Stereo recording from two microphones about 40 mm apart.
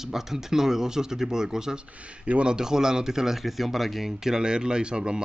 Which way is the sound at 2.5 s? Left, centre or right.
Centre.